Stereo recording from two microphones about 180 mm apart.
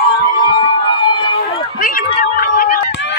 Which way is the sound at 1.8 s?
50° left (ahead or behind).